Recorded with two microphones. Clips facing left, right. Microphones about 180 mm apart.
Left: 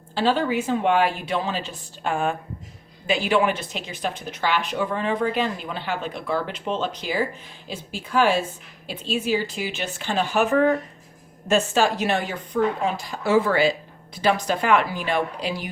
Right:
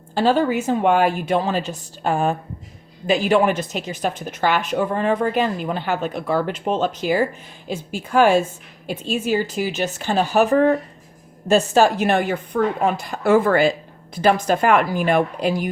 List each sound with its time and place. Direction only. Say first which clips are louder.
0.1 s speech: right 4 dB; 45° right (ahead or behind)